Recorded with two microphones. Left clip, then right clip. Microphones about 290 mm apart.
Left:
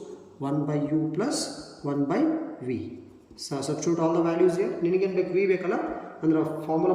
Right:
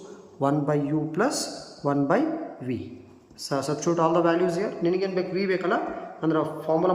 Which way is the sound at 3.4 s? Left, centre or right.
Centre.